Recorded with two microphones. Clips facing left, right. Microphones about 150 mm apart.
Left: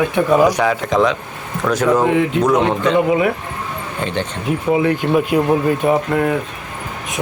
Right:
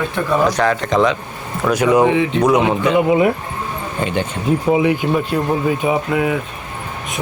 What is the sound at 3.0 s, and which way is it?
Speech, 25° right (ahead or behind).